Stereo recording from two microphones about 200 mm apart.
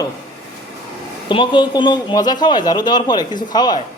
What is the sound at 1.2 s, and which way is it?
Speech, 25° left (ahead or behind).